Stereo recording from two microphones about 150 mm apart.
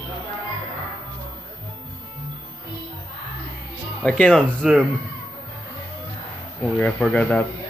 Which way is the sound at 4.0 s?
5° left (ahead or behind).